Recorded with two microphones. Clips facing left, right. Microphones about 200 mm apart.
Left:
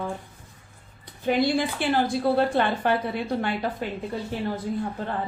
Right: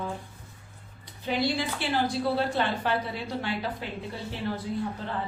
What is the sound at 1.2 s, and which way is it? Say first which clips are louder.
A woman's voice: left 5 dB; 55° left (ahead or behind).